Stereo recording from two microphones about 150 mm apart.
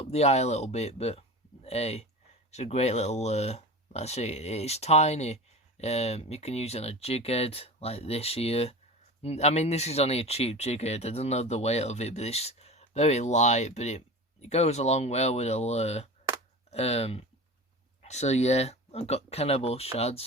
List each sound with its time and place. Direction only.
0.0 s speech: 45° left (ahead or behind)